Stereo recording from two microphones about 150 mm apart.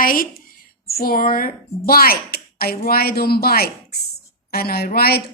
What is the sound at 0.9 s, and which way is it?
A woman's voice, 85° left.